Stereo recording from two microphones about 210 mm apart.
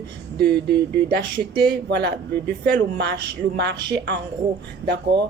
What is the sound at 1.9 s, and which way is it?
A woman's voice, 55° right (ahead or behind).